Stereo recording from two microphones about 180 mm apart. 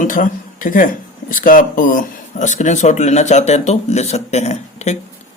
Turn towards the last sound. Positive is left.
turn(degrees=40)  # may be behind; listen again after turning